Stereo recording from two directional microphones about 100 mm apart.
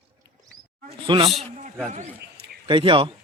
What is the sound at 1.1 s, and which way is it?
Speech, 55° right (ahead or behind).